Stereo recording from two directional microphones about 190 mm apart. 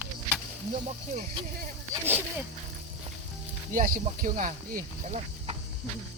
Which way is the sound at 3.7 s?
45° right (ahead or behind).